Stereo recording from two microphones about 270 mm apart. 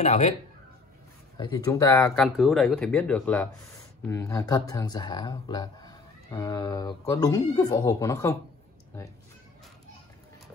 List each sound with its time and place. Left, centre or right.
0.0 s speech: left
1.4 s speech: centre